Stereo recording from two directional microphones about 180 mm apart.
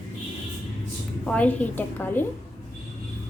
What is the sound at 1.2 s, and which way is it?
A woman's voice, 5° left (ahead or behind).